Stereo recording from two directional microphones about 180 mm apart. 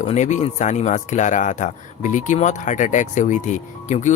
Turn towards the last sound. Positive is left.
turn(degrees=45)  # may be behind; listen again after turning